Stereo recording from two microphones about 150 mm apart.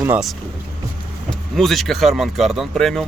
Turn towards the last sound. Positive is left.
turn(degrees=0)  # may be behind; listen again after turning